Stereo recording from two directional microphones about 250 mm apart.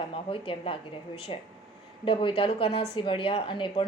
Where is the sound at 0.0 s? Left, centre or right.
Left.